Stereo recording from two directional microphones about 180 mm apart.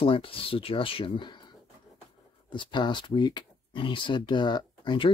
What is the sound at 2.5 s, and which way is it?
Speech, 25° left (ahead or behind).